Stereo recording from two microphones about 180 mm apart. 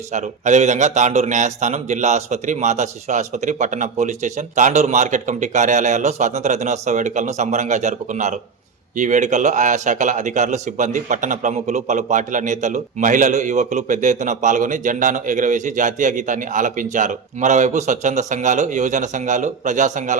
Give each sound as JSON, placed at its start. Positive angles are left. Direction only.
{"t": 0.1, "sound": "a man's voice", "side_deg": -40}